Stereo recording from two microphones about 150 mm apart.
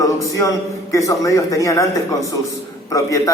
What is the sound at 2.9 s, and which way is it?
Speech, 20° left (ahead or behind).